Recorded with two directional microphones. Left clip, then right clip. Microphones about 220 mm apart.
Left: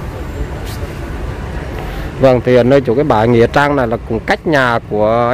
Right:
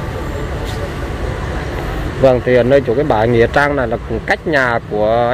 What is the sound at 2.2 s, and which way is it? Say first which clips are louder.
Speech: left 2 dB; 30° left (ahead or behind).